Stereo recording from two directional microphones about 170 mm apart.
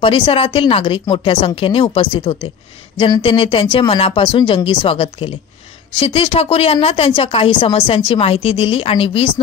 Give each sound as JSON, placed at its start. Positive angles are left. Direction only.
{"t": 0.0, "sound": "speech", "side_deg": 35}